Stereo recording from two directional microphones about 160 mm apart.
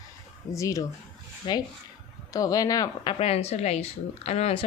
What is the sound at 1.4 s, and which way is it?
Speech, 30° left (ahead or behind).